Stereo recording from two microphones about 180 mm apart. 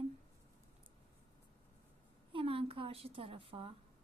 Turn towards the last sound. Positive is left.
turn(degrees=-30)  # may be behind; listen again after turning